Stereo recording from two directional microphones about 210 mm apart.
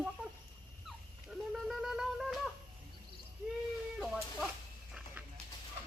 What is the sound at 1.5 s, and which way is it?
Wind instrument, centre (ahead or behind).